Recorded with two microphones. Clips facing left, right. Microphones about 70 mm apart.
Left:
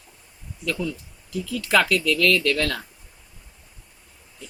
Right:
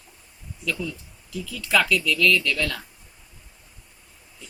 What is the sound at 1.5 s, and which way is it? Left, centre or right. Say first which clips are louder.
Speech: left 2 dB; left.